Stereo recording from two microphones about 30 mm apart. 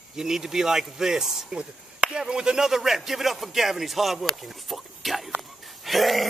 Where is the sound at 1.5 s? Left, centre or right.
Right.